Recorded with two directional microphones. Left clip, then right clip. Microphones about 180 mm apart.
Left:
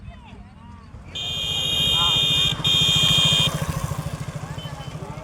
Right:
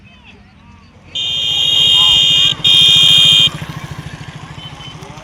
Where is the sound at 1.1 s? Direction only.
60° left (ahead or behind).